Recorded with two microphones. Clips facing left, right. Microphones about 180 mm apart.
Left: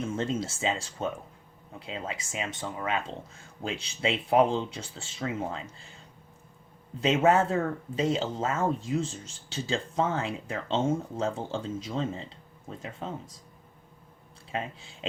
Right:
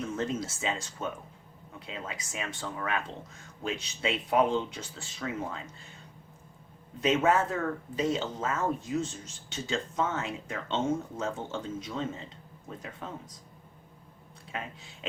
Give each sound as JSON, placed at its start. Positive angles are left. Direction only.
{"t": 0.2, "sound": "speech", "side_deg": 25}
{"t": 7.0, "sound": "speech", "side_deg": 30}
{"t": 14.5, "sound": "speech", "side_deg": 30}